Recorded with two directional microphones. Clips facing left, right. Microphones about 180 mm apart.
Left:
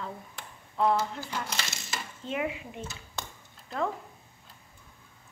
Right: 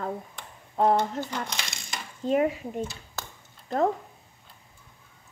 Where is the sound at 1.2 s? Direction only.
5° left (ahead or behind).